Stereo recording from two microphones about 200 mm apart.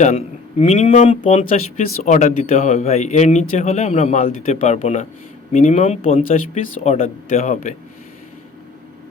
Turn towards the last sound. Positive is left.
turn(degrees=40)  # may be behind; listen again after turning